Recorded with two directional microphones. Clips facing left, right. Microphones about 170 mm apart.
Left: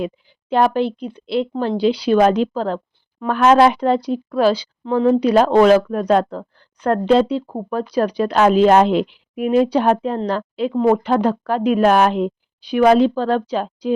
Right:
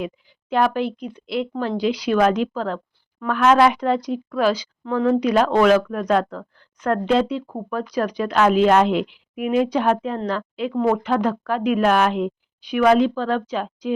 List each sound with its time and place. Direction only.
0.5 s speech: 30° left (ahead or behind)